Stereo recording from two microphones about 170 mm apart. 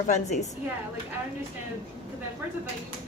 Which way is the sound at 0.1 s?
45° left (ahead or behind).